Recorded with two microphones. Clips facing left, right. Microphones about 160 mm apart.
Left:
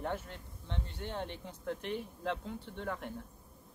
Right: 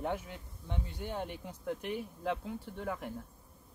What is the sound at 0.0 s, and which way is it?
Speech, 10° right (ahead or behind).